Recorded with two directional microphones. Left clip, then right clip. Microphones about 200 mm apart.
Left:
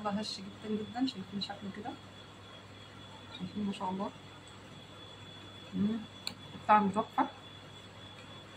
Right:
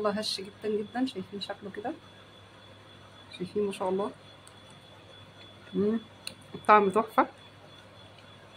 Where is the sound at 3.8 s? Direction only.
55° right (ahead or behind).